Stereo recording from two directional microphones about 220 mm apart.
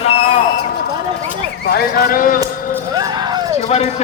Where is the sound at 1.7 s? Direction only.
45° left (ahead or behind).